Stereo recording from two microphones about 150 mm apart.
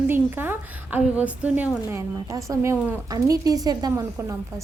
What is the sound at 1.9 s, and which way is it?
A woman's voice, 20° right (ahead or behind).